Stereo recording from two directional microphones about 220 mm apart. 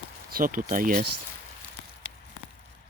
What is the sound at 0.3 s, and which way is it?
Speech, 40° right (ahead or behind).